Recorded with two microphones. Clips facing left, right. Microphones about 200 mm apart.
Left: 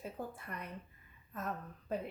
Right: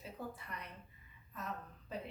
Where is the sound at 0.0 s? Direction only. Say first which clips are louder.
Left 3 dB; 50° left (ahead or behind).